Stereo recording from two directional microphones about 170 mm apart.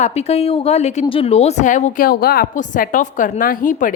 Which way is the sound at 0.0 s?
40° left (ahead or behind).